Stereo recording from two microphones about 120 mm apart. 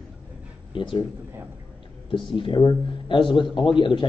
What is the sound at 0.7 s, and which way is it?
Speech, 45° left (ahead or behind).